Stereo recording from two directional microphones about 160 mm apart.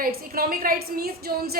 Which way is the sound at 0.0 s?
70° right (ahead or behind).